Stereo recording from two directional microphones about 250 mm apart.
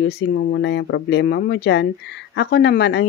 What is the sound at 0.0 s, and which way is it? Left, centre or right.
Speech, left.